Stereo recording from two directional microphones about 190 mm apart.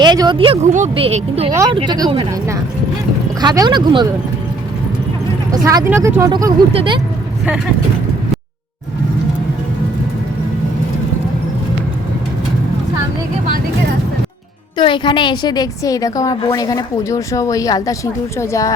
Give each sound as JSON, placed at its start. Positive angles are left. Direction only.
{"t": 0.0, "sound": "speech", "side_deg": -20}
{"t": 5.6, "sound": "speech", "side_deg": -15}
{"t": 14.8, "sound": "a woman's voice", "side_deg": 25}